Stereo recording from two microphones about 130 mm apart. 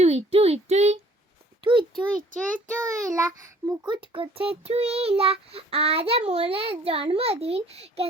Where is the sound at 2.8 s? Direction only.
25° right (ahead or behind); by 8.1 s 50° right (ahead or behind).